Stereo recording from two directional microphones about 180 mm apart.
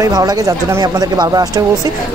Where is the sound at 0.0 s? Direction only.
20° right (ahead or behind).